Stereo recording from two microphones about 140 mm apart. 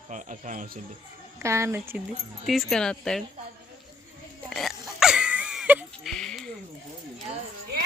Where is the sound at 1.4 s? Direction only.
20° right (ahead or behind).